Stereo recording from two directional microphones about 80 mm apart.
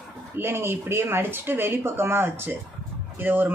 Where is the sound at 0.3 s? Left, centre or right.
Right.